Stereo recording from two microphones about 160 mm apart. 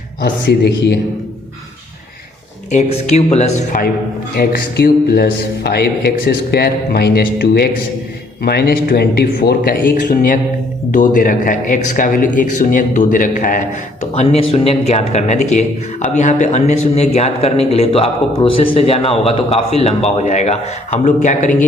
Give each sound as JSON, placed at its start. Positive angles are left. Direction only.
{"t": 0.2, "sound": "speech", "side_deg": 90}
{"t": 2.6, "sound": "speech", "side_deg": 45}
{"t": 4.4, "sound": "a man's voice", "side_deg": 75}
{"t": 14.2, "sound": "speech", "side_deg": 40}